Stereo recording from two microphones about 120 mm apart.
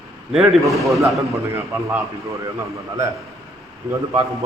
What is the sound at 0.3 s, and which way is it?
Speech, centre (ahead or behind).